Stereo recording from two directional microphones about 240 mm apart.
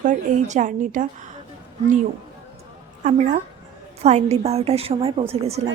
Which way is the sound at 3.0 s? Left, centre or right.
Right.